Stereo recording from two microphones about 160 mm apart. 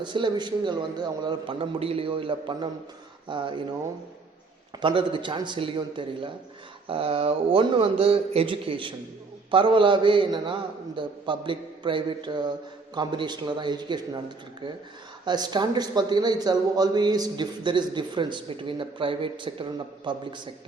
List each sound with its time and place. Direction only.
0.0 s a man's voice: 30° right (ahead or behind)
4.8 s a man's voice: 30° right (ahead or behind)
15.2 s a man's voice: 25° right (ahead or behind)